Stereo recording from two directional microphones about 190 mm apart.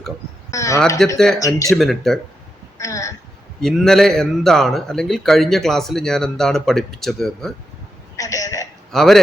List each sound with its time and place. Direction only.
0.5 s speech: 15° left (ahead or behind)
1.0 s a man's voice: centre (ahead or behind)
1.4 s speech: 15° left (ahead or behind)
1.7 s a man's voice: centre (ahead or behind)
2.7 s a sound: 15° left (ahead or behind)
3.6 s a man's voice: centre (ahead or behind)
8.1 s a sound: 15° left (ahead or behind)
8.9 s a man's voice: centre (ahead or behind)